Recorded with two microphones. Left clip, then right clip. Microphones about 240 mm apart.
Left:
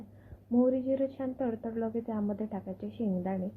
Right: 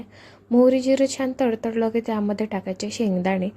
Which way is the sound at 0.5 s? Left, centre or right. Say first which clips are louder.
Right 11 dB; right.